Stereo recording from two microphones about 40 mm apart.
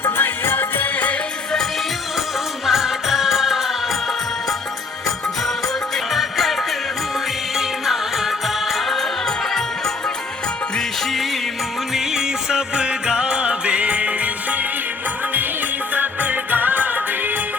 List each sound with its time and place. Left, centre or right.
0.0 s music: left
2.6 s music: centre
6.1 s music: centre
8.7 s music: centre
11.9 s music: centre; by 14.1 s right
16.0 s music: right